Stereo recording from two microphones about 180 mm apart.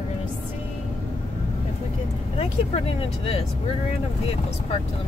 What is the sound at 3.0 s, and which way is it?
Speech, 30° left (ahead or behind).